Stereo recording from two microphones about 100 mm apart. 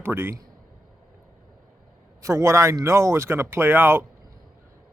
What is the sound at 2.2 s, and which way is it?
Speech, 30° right (ahead or behind).